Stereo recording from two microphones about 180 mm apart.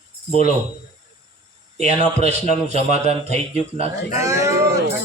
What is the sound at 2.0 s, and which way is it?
A man's voice, 35° right (ahead or behind).